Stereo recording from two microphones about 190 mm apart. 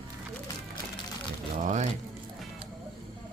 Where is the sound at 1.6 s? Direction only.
40° right (ahead or behind).